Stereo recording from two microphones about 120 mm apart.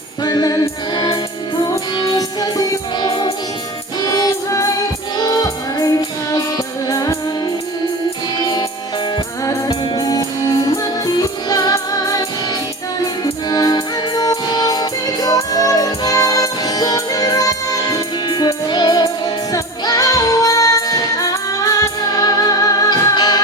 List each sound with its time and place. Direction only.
0.2 s music: 35° left (ahead or behind)
9.1 s music: 30° left (ahead or behind)
13.5 s music: 35° left (ahead or behind)